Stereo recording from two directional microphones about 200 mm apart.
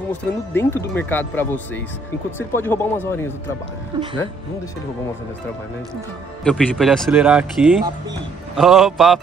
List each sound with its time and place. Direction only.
0.1 s speech: 10° left (ahead or behind)
3.9 s speech: 20° right (ahead or behind)
6.4 s a man's voice: centre (ahead or behind)